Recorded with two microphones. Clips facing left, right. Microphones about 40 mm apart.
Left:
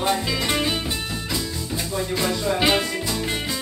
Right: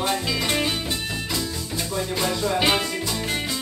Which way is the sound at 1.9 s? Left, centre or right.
Centre.